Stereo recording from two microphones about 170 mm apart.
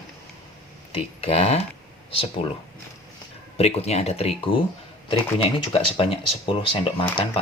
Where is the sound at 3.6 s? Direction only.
40° left (ahead or behind).